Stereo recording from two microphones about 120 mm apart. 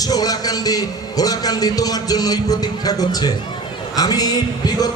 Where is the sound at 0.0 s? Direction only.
30° left (ahead or behind).